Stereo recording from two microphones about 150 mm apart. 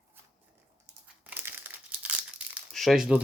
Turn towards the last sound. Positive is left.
turn(degrees=-5)  # may be behind; listen again after turning